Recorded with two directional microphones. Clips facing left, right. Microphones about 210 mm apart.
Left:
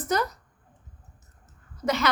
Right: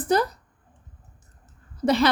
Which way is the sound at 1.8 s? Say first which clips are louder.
Right 6 dB; 30° right (ahead or behind).